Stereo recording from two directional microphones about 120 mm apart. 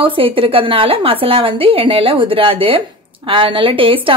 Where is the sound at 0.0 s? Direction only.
45° right (ahead or behind).